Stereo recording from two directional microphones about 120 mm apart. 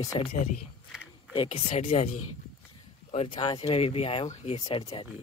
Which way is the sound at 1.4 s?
60° left (ahead or behind).